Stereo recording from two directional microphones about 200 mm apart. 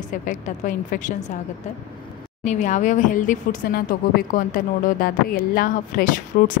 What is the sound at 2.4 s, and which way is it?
Speech, 35° left (ahead or behind).